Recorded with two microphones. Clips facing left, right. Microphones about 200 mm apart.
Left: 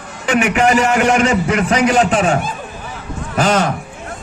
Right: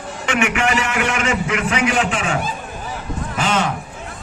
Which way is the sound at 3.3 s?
40° left (ahead or behind).